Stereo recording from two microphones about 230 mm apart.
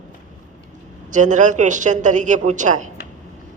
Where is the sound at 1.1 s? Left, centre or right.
Right.